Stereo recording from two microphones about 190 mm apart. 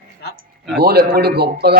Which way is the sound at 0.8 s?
55° right (ahead or behind).